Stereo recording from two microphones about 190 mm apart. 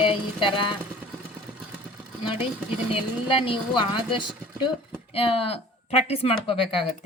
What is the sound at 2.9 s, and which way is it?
A woman's voice, 30° left (ahead or behind).